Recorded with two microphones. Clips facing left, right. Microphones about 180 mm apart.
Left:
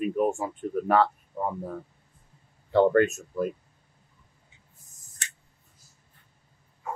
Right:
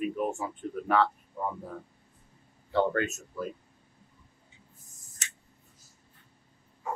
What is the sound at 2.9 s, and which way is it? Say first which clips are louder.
Speech: left 9 dB; 50° left (ahead or behind).